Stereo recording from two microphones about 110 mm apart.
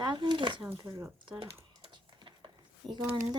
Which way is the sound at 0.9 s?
25° right (ahead or behind).